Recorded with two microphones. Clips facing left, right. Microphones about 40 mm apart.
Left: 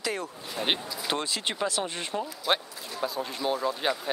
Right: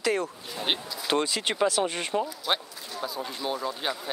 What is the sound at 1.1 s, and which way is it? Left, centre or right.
Speech, centre.